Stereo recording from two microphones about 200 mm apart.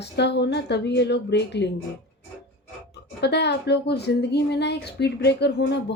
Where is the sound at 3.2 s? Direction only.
55° left (ahead or behind).